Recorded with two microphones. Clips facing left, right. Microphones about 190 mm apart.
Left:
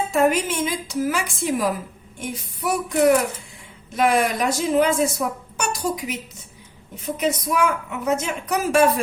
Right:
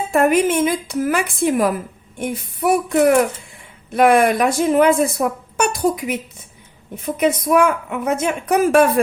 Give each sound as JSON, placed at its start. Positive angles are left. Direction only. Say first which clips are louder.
{"t": 0.1, "sound": "speech", "louder": "right 6 dB", "side_deg": -55}